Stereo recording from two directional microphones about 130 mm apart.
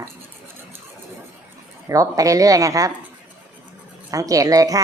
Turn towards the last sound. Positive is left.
turn(degrees=-25)  # may be behind; listen again after turning